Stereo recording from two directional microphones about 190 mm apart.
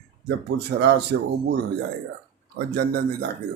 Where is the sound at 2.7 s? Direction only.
55° right (ahead or behind).